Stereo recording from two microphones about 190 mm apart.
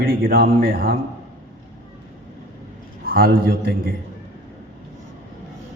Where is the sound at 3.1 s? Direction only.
50° right (ahead or behind).